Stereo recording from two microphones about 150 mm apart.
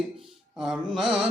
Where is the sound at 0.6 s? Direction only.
5° right (ahead or behind).